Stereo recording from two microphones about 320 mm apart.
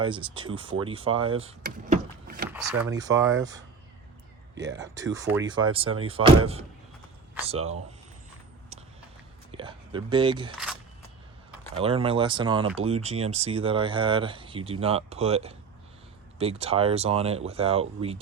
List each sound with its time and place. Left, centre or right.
0.0 s speech: centre
1.5 s vehicle: right
2.5 s speech: centre
4.5 s speech: right
4.8 s speech: centre
7.4 s speech: centre
9.5 s a sound: centre
11.7 s speech: centre